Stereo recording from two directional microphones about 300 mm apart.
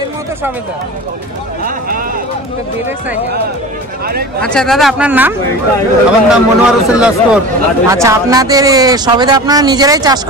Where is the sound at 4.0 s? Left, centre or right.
Right.